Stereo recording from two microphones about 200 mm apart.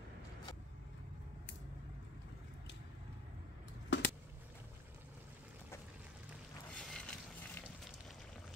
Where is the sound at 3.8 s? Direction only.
60° left (ahead or behind).